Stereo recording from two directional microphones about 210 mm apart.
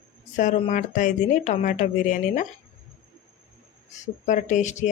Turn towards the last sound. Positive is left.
turn(degrees=35)  # may be behind; listen again after turning